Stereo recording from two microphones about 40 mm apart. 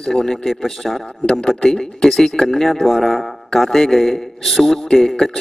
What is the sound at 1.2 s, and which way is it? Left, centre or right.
Speech, centre.